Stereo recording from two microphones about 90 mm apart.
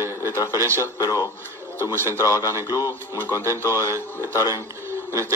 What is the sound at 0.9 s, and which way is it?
Speech, 40° left (ahead or behind).